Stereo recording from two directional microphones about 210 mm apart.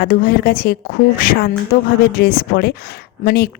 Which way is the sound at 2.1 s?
45° left (ahead or behind).